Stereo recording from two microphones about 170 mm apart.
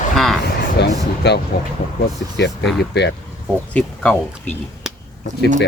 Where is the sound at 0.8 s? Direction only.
75° left (ahead or behind).